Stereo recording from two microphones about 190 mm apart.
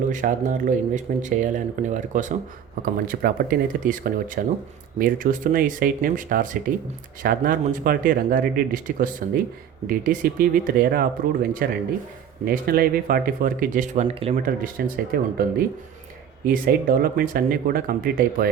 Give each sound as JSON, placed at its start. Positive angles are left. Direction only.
{"t": 0.1, "sound": "speech", "side_deg": -40}
{"t": 14.8, "sound": "speech", "side_deg": -55}